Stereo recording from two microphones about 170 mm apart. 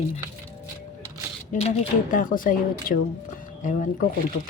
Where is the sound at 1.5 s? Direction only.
40° left (ahead or behind).